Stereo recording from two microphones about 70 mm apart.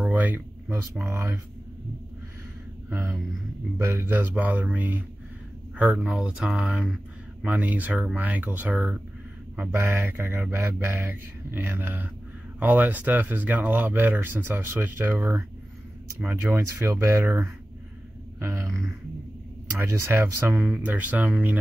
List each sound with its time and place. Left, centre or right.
0.0 s a sound: right
1.0 s speech: right
2.9 s speech: right
6.0 s speech: centre
9.7 s speech: right
18.4 s a sound: right
19.8 s speech: right
20.5 s speech: centre